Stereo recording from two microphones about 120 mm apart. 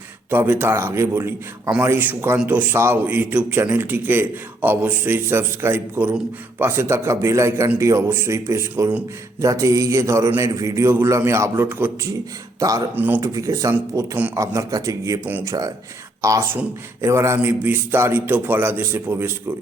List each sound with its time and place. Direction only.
0.3 s a man's voice: 15° right (ahead or behind)
12.5 s a man's voice: 30° right (ahead or behind)
15.2 s a man's voice: 15° right (ahead or behind)
15.4 s a man's voice: 30° right (ahead or behind)